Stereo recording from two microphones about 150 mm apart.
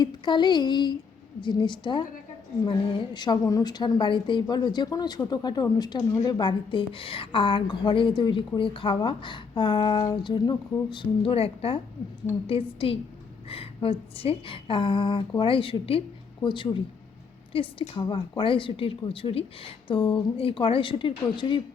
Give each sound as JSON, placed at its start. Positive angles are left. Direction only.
{"t": 0.0, "sound": "a woman's voice", "side_deg": 30}